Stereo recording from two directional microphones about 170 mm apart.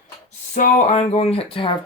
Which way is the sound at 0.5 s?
45° left (ahead or behind).